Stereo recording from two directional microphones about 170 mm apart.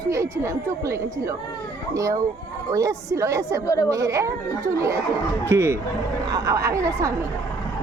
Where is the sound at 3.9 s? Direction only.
20° right (ahead or behind).